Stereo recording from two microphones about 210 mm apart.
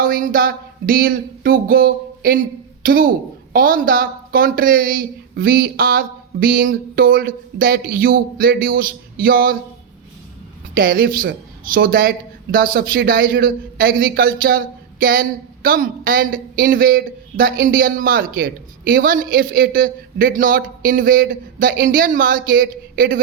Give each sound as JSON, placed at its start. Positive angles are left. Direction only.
{"t": 0.0, "sound": "a sound", "side_deg": -40}
{"t": 3.5, "sound": "speech", "side_deg": -45}
{"t": 10.8, "sound": "speech", "side_deg": -45}